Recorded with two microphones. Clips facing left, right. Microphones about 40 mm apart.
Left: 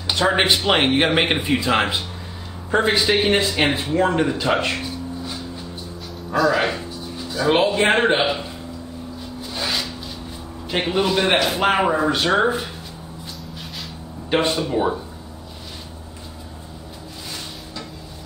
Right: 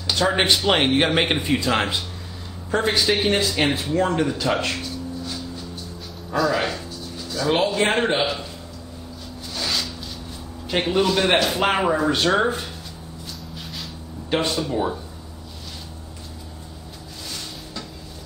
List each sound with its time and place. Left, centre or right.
0.0 s a man's voice: centre
6.3 s speech: centre
6.7 s a sound: centre
9.5 s a sound: centre
10.7 s a man's voice: centre
14.3 s speech: left